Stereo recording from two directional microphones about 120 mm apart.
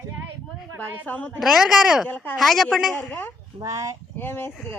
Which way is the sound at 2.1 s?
15° left (ahead or behind).